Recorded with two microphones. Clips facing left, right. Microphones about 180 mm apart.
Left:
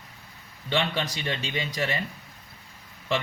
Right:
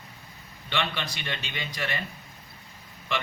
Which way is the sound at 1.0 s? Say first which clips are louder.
Left 5 dB; 35° left (ahead or behind).